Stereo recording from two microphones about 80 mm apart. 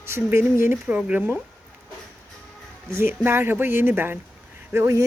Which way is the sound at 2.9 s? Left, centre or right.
Right.